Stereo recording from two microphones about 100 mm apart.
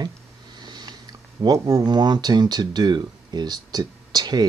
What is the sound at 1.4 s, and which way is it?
Speech, 40° right (ahead or behind).